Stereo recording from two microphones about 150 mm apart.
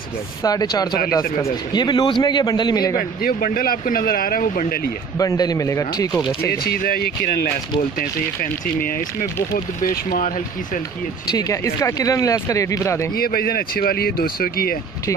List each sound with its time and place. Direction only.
0.4 s a man's voice: 25° left (ahead or behind)
3.0 s speech: 75° left (ahead or behind)
5.2 s a man's voice: 25° left (ahead or behind)
6.6 s speech: 90° left
8.0 s speech: 75° left (ahead or behind); by 10.8 s 60° left (ahead or behind)
11.3 s a man's voice: 20° left (ahead or behind)
13.1 s speech: 85° left